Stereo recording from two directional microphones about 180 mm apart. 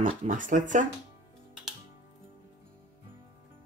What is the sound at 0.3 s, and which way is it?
Speech, 45° right (ahead or behind).